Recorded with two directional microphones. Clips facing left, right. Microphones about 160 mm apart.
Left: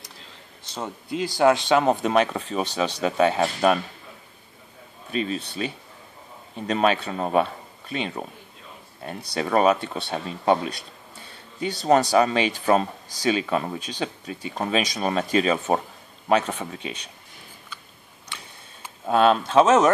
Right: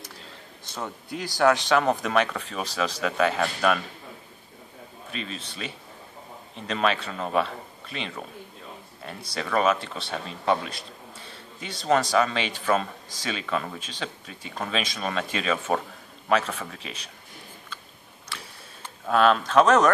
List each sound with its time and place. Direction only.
0.7 s speech: 20° left (ahead or behind)
5.1 s speech: 40° left (ahead or behind)
6.7 s speech: 40° left (ahead or behind)
9.4 s speech: 40° left (ahead or behind)
11.9 s speech: 40° left (ahead or behind)
19.0 s speech: 30° left (ahead or behind)